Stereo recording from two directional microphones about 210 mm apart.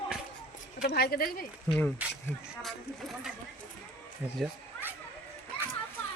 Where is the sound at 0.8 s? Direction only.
50° left (ahead or behind).